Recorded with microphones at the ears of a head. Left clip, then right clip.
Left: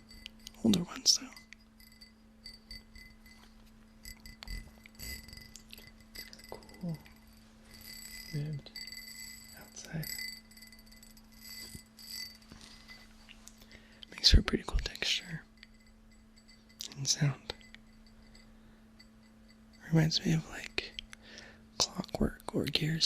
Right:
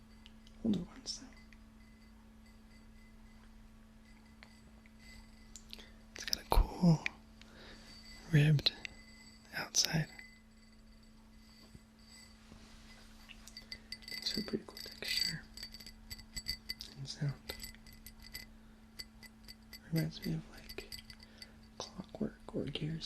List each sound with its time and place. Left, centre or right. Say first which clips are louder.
0.2 s whispering: left 8 dB; left
2.4 s clock: left 13 dB; left
4.0 s clock: left 11 dB; left
6.2 s whispering: right 13 dB; right
7.9 s bicycle bell: left 7 dB; left
8.3 s speech: right 16 dB; right
8.7 s a sound: left 4 dB; left
9.5 s whispering: right 13 dB; right
10.1 s a sound: left 12 dB; left
11.4 s clock: left 15 dB; left
14.2 s whispering: left 12 dB; left
15.2 s a sound: right 9 dB; right
16.8 s chink: left 12 dB; left
19.8 s whispering: left 10 dB; left